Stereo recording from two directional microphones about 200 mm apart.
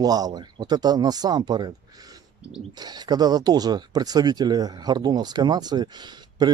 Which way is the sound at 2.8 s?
20° right (ahead or behind).